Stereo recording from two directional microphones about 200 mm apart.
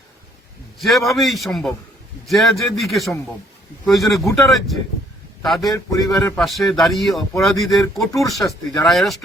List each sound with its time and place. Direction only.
0.8 s a man's voice: centre (ahead or behind)
5.7 s a man's voice: 15° left (ahead or behind)
6.1 s speech: 5° left (ahead or behind)